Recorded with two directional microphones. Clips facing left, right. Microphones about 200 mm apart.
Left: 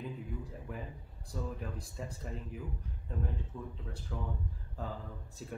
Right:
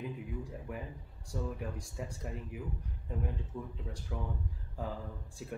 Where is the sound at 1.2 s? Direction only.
10° right (ahead or behind).